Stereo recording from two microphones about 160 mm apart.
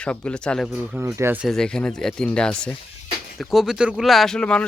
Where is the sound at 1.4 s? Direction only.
5° left (ahead or behind).